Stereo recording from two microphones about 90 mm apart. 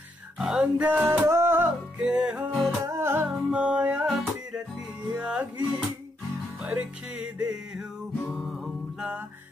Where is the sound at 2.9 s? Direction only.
30° right (ahead or behind).